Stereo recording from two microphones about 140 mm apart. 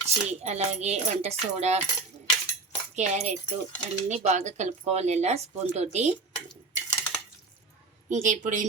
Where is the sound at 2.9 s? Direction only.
55° right (ahead or behind).